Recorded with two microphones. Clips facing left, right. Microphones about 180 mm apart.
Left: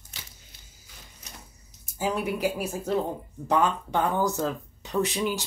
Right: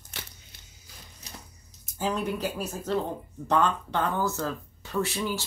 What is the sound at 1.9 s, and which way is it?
Speech, 10° left (ahead or behind).